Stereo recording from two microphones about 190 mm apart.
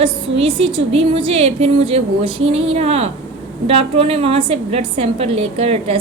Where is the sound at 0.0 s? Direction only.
30° right (ahead or behind).